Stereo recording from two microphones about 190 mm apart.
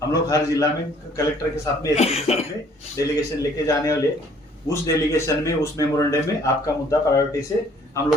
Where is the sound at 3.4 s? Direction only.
15° left (ahead or behind).